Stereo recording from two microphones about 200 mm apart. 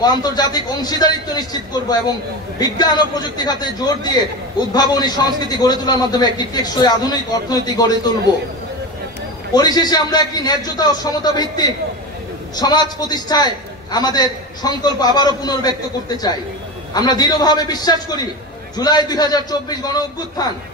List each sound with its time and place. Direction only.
0.0 s a man's voice: 20° left (ahead or behind)
9.5 s a man's voice: 20° left (ahead or behind)